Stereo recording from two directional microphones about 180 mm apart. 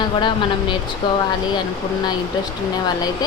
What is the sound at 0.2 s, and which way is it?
Speech, 25° left (ahead or behind).